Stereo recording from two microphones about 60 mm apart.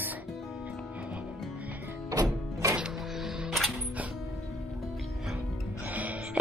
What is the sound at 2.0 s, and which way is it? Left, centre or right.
Music, right.